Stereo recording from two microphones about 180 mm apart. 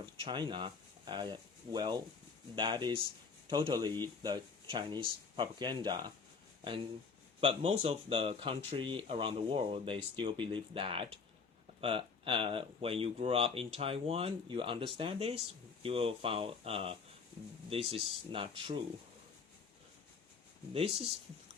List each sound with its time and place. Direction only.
0.0 s speech: 25° right (ahead or behind)
7.4 s speech: 35° right (ahead or behind)
20.7 s speech: 30° right (ahead or behind)